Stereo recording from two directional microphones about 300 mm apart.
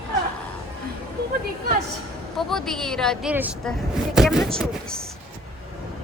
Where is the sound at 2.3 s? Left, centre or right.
Centre.